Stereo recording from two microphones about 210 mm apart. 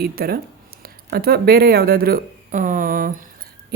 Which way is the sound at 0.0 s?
45° right (ahead or behind).